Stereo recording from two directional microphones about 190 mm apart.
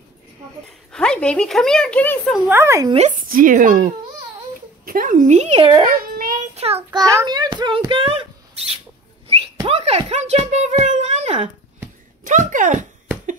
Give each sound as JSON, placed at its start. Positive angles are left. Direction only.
{"t": 0.9, "sound": "a woman's voice", "side_deg": 5}
{"t": 2.4, "sound": "speech", "side_deg": -10}
{"t": 2.9, "sound": "speech", "side_deg": -40}
{"t": 6.1, "sound": "child singing", "side_deg": -45}
{"t": 6.6, "sound": "speech", "side_deg": -30}
{"t": 7.0, "sound": "a child's voice", "side_deg": -20}